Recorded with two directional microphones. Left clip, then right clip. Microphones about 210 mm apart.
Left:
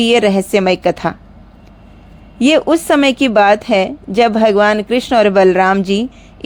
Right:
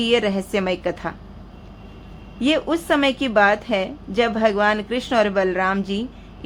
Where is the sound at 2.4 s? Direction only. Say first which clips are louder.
Left 9 dB; 35° left (ahead or behind).